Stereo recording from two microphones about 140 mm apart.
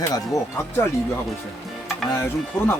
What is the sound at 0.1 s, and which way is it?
Speech, 20° left (ahead or behind).